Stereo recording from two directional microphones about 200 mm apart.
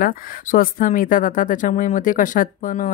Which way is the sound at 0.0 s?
45° left (ahead or behind).